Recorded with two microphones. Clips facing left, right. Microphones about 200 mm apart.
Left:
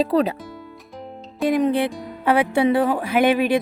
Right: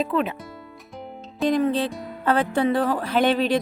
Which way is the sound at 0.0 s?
35° left (ahead or behind).